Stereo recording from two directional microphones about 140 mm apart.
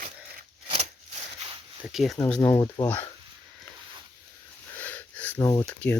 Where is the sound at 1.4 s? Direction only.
50° right (ahead or behind).